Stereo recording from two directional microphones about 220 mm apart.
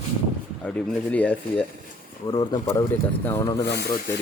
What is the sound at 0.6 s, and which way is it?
Speech, 5° left (ahead or behind).